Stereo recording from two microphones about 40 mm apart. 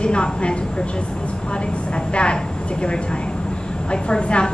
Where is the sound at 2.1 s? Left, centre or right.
Left.